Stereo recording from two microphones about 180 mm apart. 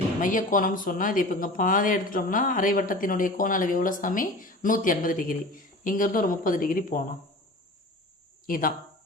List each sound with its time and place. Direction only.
0.2 s speech: 50° left (ahead or behind)
8.4 s speech: 50° left (ahead or behind)